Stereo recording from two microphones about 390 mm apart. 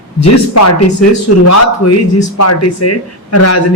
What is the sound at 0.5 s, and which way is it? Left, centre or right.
A man's voice, left.